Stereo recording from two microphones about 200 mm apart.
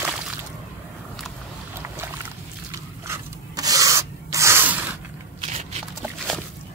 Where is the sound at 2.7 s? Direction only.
15° right (ahead or behind).